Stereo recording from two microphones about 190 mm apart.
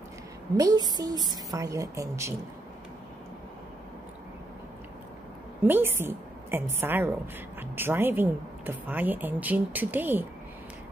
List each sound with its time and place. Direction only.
0.6 s speech: 20° right (ahead or behind)
5.6 s a woman's voice: 10° right (ahead or behind)